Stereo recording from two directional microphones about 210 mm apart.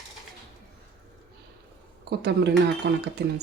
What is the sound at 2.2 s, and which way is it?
Speech, 50° right (ahead or behind).